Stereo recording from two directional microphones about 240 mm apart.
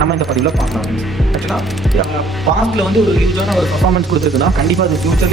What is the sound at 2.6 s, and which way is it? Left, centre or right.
Speech, centre.